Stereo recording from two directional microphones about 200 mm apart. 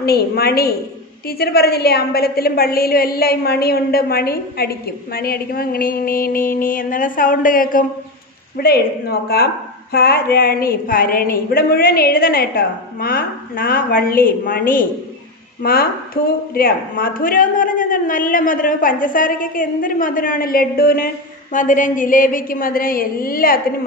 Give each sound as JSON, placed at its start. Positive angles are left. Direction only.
{"t": 0.0, "sound": "a woman's voice", "side_deg": 50}